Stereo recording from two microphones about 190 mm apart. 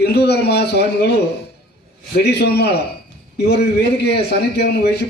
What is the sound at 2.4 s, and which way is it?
A man's voice, 60° left (ahead or behind).